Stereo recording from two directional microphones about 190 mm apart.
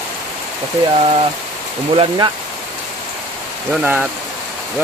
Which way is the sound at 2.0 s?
25° right (ahead or behind).